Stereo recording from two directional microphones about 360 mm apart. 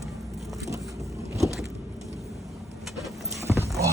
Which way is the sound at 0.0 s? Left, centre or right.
Centre.